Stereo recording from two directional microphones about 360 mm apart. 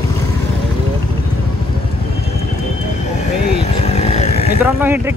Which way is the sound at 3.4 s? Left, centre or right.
Left.